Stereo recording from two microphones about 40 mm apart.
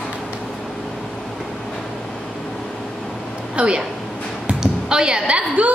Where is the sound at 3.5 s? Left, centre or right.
Right.